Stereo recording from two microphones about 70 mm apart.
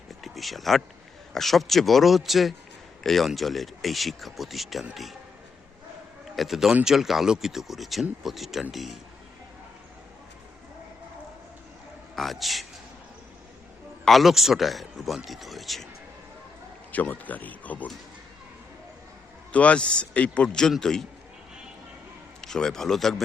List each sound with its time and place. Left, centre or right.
0.1 s a sound: centre
1.3 s a man's voice: centre
6.3 s a man's voice: centre
12.1 s a man's voice: centre
14.0 s a man's voice: centre
16.9 s speech: left
19.5 s a man's voice: centre
22.4 s a man's voice: centre